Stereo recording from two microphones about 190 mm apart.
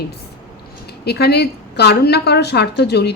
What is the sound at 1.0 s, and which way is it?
A woman's voice, 60° left (ahead or behind).